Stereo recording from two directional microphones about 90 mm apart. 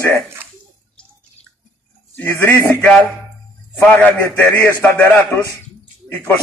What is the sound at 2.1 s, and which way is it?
Speech, 20° left (ahead or behind).